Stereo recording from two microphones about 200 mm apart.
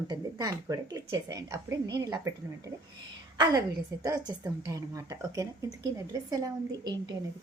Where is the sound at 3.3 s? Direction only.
20° right (ahead or behind).